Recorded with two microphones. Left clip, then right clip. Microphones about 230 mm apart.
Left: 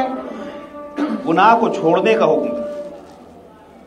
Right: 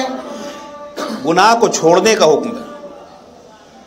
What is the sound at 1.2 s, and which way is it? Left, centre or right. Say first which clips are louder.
A woman's voice: right 2 dB; right.